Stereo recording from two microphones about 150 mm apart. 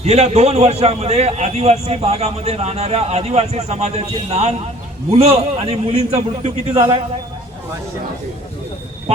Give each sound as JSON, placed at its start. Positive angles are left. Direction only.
{"t": 0.0, "sound": "a man's voice", "side_deg": -45}